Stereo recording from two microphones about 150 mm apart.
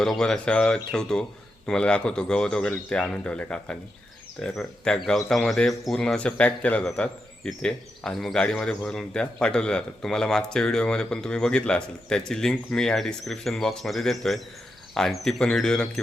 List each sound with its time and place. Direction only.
0.0 s speech: 5° left (ahead or behind)